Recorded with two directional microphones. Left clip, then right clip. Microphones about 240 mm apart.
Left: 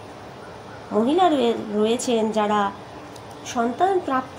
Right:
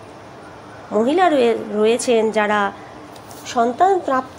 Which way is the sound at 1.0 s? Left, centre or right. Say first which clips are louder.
Right 4 dB; centre.